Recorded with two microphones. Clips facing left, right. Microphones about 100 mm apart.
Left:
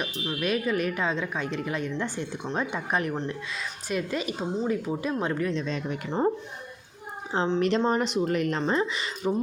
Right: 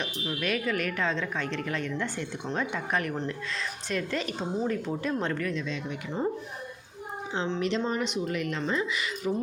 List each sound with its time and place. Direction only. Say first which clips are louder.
0.3 s a woman's voice: left 3 dB; 20° left (ahead or behind)
5.6 s speech: left 3 dB; 40° left (ahead or behind)
7.3 s speech: left 5 dB; 40° left (ahead or behind)